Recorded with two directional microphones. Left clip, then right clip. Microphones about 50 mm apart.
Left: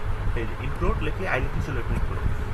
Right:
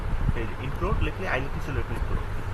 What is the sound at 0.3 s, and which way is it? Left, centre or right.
Speech, centre.